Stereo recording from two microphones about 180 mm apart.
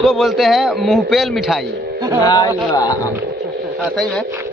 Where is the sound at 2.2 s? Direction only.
20° left (ahead or behind).